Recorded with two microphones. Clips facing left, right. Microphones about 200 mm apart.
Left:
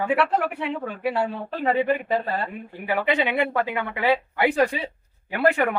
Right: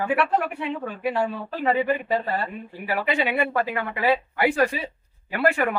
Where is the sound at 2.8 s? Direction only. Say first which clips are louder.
Left 2 dB; 20° left (ahead or behind).